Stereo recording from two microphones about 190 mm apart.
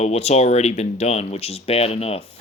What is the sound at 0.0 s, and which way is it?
Speech, 35° left (ahead or behind).